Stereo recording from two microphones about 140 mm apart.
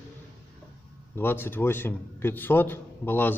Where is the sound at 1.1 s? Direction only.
15° left (ahead or behind).